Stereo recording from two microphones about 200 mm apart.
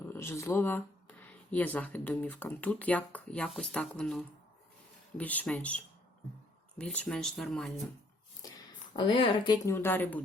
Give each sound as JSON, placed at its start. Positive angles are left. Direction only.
{"t": 0.0, "sound": "speech", "side_deg": 10}
{"t": 9.0, "sound": "speech", "side_deg": 25}